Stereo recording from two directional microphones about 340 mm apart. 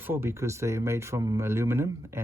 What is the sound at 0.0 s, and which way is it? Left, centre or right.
Speech, centre.